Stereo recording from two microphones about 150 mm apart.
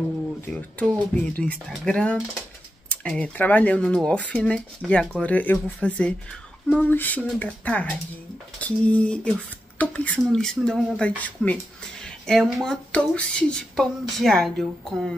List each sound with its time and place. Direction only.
0.5 s speech: 10° left (ahead or behind)